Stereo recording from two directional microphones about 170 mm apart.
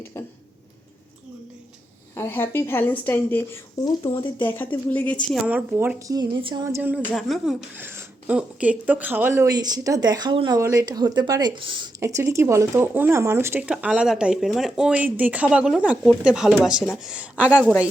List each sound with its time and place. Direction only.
0.0 s speech: 15° left (ahead or behind)
2.1 s speech: 15° left (ahead or behind)
5.5 s speech: 10° right (ahead or behind)
6.1 s speech: 25° right (ahead or behind)
7.1 s a woman's voice: centre (ahead or behind)
7.8 s a woman's voice: 10° right (ahead or behind)